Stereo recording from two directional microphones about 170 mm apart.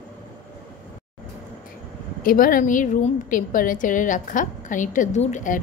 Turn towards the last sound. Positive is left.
turn(degrees=45)  # may be behind; listen again after turning